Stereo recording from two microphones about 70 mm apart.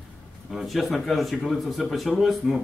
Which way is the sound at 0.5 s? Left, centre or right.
Centre.